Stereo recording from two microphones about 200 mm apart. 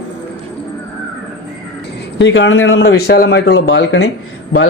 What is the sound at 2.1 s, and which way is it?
Speech, 65° left (ahead or behind).